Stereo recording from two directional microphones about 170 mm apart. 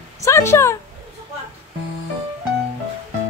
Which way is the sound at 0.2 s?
15° left (ahead or behind).